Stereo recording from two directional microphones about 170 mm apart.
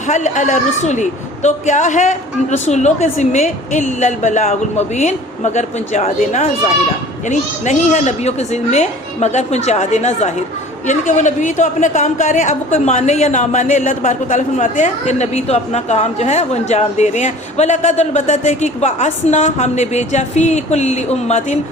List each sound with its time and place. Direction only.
0.1 s a woman's voice: 45° left (ahead or behind)